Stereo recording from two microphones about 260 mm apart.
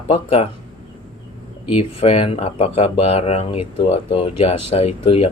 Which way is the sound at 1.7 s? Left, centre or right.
Left.